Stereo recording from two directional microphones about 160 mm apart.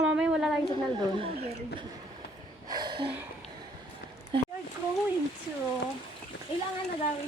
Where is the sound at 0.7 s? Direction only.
35° right (ahead or behind).